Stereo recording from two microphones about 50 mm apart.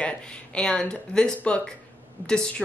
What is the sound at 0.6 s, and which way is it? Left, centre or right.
Speech, centre.